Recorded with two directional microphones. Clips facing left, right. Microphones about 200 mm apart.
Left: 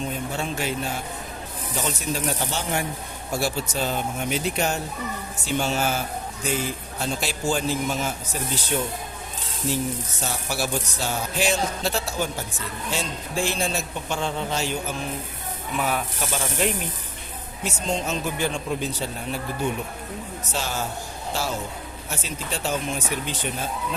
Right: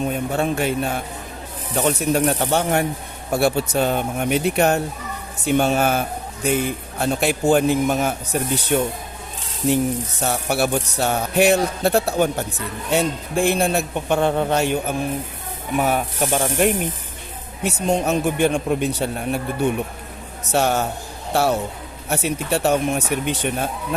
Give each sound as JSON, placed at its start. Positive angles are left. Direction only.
{"t": 0.0, "sound": "music", "side_deg": -55}
{"t": 15.8, "sound": "speech", "side_deg": -45}
{"t": 17.6, "sound": "music", "side_deg": -65}
{"t": 20.5, "sound": "music", "side_deg": -60}